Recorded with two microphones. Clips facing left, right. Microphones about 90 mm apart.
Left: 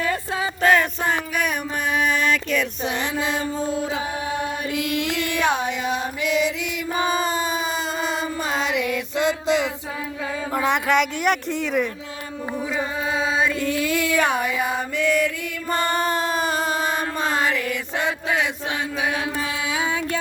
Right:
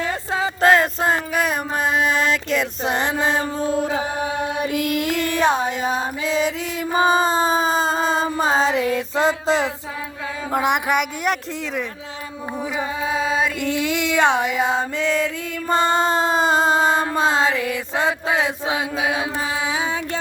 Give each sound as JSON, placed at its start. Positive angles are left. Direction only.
{"t": 0.0, "sound": "a sound", "side_deg": -30}
{"t": 1.1, "sound": "music", "side_deg": -35}
{"t": 2.8, "sound": "music", "side_deg": -40}
{"t": 4.7, "sound": "music", "side_deg": -50}
{"t": 10.5, "sound": "a sound", "side_deg": -15}
{"t": 11.2, "sound": "speech", "side_deg": 0}
{"t": 13.6, "sound": "female singing", "side_deg": -20}
{"t": 15.7, "sound": "a sound", "side_deg": -25}
{"t": 18.9, "sound": "mantra", "side_deg": -25}